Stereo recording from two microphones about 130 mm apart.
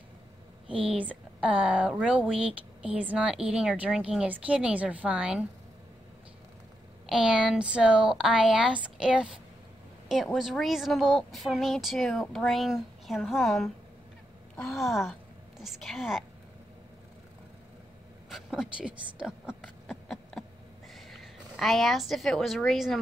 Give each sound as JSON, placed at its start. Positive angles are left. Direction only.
{"t": 1.0, "sound": "speech", "side_deg": -10}
{"t": 7.1, "sound": "a woman's voice", "side_deg": -5}
{"t": 18.3, "sound": "a woman's voice", "side_deg": 0}